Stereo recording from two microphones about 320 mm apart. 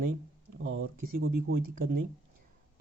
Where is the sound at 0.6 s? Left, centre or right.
Right.